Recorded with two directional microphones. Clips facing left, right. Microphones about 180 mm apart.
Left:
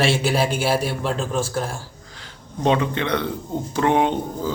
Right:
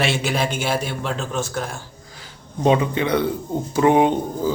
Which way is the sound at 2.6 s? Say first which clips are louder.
Right 2 dB; 10° right (ahead or behind).